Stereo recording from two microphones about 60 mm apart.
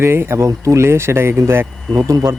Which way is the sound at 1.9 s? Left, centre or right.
Right.